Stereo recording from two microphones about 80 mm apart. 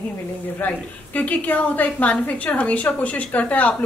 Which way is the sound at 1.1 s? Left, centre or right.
Centre.